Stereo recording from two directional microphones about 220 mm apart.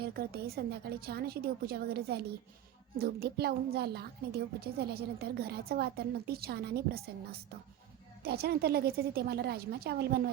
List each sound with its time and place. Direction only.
0.0 s a woman's voice: 45° right (ahead or behind)